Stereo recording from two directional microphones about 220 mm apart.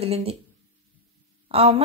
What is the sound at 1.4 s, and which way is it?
Speech, 25° right (ahead or behind).